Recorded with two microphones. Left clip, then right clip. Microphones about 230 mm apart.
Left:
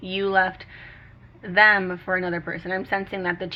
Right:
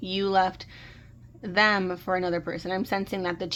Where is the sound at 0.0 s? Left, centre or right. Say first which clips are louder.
Left 2 dB; right.